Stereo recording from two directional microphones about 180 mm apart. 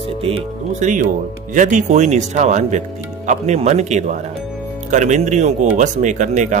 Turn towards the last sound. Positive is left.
turn(degrees=-40)  # may be behind; listen again after turning